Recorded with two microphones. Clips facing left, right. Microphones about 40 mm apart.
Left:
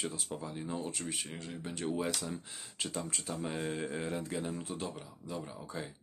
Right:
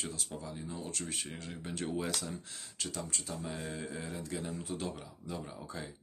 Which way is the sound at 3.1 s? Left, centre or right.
Left.